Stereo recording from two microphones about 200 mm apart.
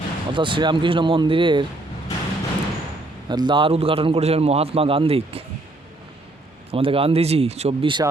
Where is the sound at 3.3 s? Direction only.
20° right (ahead or behind).